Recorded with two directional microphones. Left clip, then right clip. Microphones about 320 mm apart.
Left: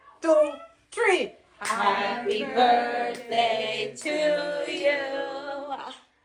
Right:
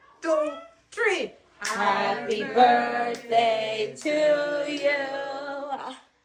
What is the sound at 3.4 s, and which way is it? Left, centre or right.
Female singing, right.